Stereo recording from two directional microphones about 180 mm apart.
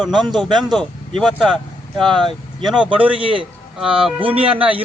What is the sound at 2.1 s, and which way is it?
Speech, 25° right (ahead or behind).